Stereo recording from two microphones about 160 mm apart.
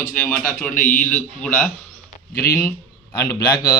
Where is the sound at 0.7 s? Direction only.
55° left (ahead or behind).